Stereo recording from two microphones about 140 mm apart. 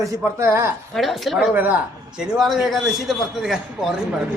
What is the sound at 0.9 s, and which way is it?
A man's voice, centre (ahead or behind).